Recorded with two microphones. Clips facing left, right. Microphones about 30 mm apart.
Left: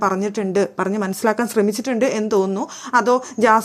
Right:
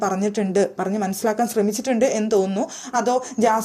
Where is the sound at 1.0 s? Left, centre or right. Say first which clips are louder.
Left 2 dB; left.